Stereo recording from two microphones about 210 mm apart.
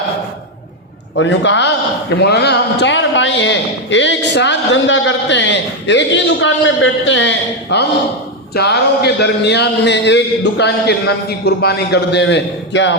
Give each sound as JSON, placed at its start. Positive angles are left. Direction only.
{"t": 1.1, "sound": "a man's voice", "side_deg": 60}